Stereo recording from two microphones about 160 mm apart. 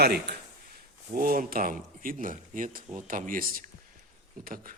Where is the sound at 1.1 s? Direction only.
65° right (ahead or behind).